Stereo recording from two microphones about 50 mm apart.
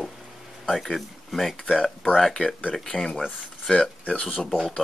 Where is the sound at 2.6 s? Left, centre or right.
Left.